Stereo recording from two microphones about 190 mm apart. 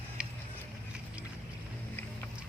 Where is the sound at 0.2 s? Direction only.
5° right (ahead or behind).